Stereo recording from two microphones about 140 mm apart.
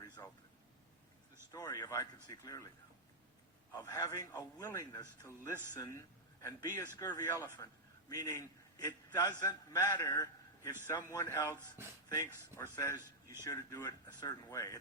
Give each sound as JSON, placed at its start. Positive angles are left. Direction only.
{"t": 0.2, "sound": "a sound", "side_deg": 25}
{"t": 1.5, "sound": "a man's voice", "side_deg": 25}
{"t": 3.7, "sound": "a man's voice", "side_deg": 30}